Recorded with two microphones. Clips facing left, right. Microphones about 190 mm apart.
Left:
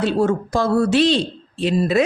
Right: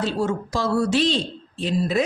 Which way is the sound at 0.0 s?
60° left (ahead or behind).